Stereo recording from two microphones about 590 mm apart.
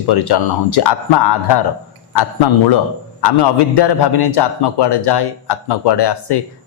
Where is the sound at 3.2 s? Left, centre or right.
Left.